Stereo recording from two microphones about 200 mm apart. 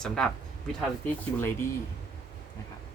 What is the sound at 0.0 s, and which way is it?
Speech, centre (ahead or behind).